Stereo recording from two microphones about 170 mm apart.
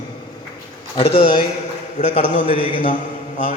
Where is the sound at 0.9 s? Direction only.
35° left (ahead or behind).